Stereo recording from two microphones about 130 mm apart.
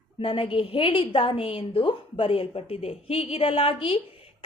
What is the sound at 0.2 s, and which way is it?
A woman's voice, 40° left (ahead or behind).